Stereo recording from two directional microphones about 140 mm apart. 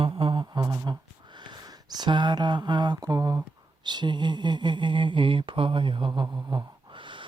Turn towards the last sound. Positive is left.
turn(degrees=-35)  # may be behind; listen again after turning